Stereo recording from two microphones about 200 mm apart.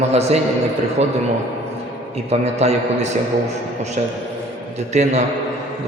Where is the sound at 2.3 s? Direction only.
30° right (ahead or behind).